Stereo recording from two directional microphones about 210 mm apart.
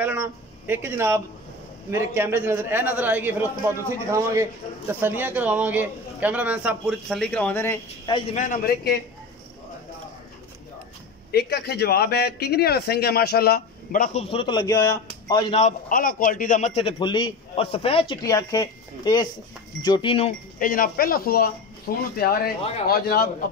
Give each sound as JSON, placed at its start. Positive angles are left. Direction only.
{"t": 0.0, "sound": "a man's voice", "side_deg": -10}
{"t": 8.1, "sound": "a man's voice", "side_deg": 35}
{"t": 11.3, "sound": "a man's voice", "side_deg": 50}
{"t": 14.3, "sound": "a man's voice", "side_deg": 20}
{"t": 15.5, "sound": "a man's voice", "side_deg": 35}
{"t": 20.5, "sound": "a man's voice", "side_deg": 40}